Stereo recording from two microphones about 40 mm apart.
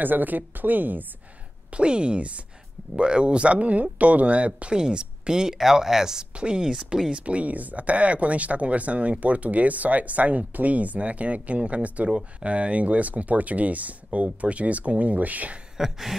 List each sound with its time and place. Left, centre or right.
0.0 s a woman's voice: right
1.7 s speech: right
4.7 s speech: right
6.3 s speech: right
7.1 s speech: right
15.8 s speech: centre